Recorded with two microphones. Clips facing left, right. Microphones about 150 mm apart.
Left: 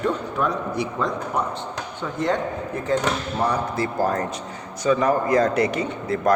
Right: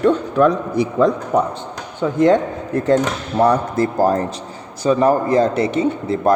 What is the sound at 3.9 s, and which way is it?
Speech, 35° right (ahead or behind).